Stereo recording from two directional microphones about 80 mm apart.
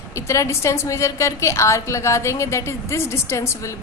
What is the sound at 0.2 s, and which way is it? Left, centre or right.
A woman's voice, left.